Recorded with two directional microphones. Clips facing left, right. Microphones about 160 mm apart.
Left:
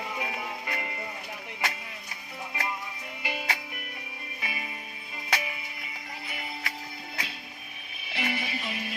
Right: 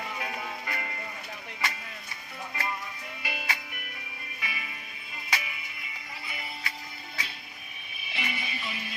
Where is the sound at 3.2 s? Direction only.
35° left (ahead or behind).